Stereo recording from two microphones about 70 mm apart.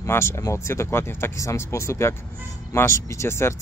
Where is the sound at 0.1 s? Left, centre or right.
Left.